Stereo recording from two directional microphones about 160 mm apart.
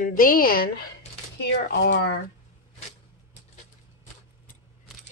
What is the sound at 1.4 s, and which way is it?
Speech, 85° left.